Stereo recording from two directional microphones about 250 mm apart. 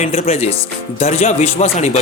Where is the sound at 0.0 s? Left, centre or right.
Left.